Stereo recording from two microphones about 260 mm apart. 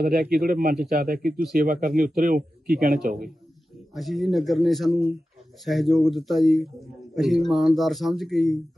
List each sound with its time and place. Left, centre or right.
0.0 s a man's voice: right
3.9 s speech: centre